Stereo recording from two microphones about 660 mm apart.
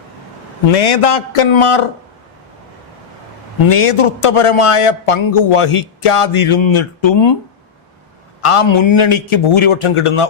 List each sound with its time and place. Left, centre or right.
0.8 s speech: left
3.7 s speech: left
8.4 s speech: left